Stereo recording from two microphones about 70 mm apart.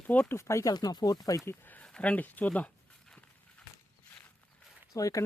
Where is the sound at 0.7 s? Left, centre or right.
Left.